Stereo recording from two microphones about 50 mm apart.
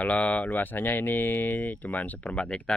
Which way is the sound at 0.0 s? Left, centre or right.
Left.